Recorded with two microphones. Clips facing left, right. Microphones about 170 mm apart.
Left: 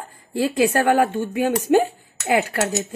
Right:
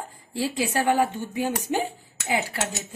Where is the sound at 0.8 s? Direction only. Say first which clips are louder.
Left 5 dB; 75° left (ahead or behind).